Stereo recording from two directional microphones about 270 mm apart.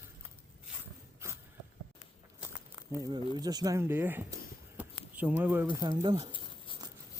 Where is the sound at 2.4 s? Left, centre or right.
Centre.